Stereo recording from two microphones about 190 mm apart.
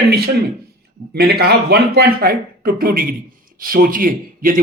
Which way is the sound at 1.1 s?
55° right (ahead or behind).